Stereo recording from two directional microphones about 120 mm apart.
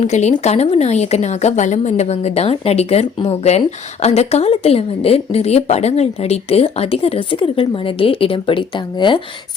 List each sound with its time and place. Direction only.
0.0 s a woman's voice: 70° left (ahead or behind); by 9.2 s 40° left (ahead or behind)